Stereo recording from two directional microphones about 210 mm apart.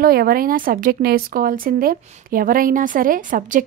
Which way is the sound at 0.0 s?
45° right (ahead or behind).